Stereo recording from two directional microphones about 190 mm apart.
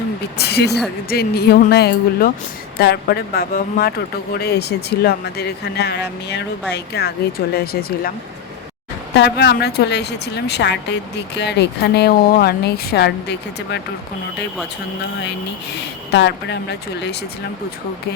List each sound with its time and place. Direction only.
0.3 s speech: 60° left (ahead or behind)
9.1 s speech: 65° left (ahead or behind)
15.7 s speech: 65° left (ahead or behind)